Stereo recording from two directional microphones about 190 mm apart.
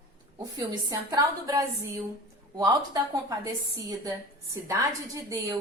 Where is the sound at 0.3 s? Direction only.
20° right (ahead or behind).